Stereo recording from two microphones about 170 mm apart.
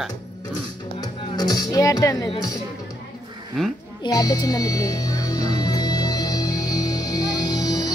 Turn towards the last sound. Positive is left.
turn(degrees=25)  # may be behind; listen again after turning